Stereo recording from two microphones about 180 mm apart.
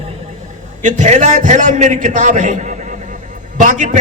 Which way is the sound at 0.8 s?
45° right (ahead or behind).